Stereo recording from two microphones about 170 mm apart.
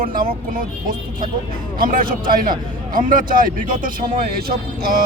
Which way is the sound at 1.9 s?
55° right (ahead or behind).